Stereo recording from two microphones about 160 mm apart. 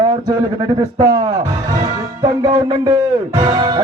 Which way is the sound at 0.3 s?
25° right (ahead or behind).